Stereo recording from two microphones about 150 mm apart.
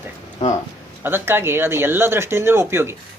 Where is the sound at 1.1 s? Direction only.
15° right (ahead or behind).